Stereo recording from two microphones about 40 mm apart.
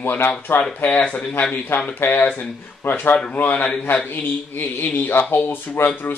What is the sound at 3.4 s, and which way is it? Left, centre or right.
Speech, left.